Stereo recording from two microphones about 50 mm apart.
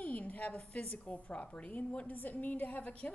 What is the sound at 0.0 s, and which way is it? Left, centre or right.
A woman's voice, left.